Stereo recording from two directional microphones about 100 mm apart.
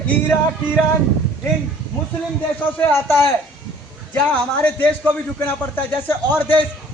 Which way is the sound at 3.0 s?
25° left (ahead or behind).